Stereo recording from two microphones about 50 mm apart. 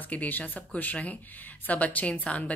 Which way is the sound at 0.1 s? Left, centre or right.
Left.